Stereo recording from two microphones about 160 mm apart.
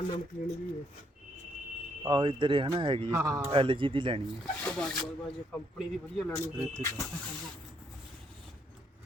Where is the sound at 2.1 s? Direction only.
30° right (ahead or behind).